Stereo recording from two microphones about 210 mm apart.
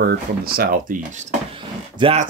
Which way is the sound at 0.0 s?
45° right (ahead or behind).